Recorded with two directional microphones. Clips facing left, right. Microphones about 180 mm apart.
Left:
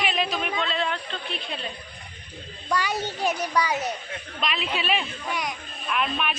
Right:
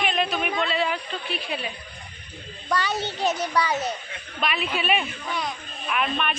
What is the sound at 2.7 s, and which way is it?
Speech, 10° left (ahead or behind).